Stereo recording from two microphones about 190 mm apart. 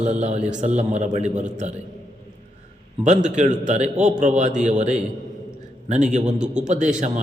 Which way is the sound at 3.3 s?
40° right (ahead or behind).